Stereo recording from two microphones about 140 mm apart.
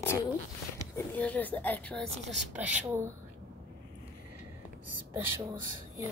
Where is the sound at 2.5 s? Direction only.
10° right (ahead or behind).